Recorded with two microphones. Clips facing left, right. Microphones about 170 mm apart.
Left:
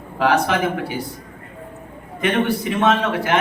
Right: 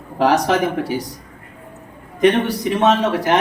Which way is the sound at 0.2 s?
40° right (ahead or behind).